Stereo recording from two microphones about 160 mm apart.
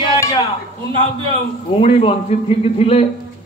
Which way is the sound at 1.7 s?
35° left (ahead or behind).